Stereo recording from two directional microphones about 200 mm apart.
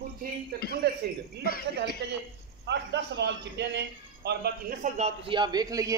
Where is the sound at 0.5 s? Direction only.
50° right (ahead or behind).